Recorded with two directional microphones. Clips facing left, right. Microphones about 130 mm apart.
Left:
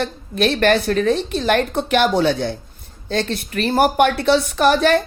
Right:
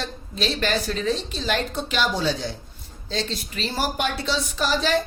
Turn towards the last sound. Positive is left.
turn(degrees=55)  # may be behind; listen again after turning